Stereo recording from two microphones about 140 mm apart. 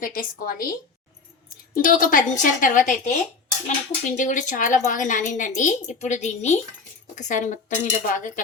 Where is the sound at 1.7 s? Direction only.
75° left (ahead or behind).